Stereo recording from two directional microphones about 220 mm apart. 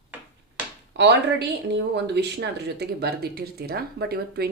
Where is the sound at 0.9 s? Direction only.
55° right (ahead or behind).